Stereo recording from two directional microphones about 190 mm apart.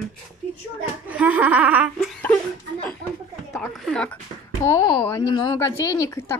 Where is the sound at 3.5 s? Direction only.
Centre (ahead or behind).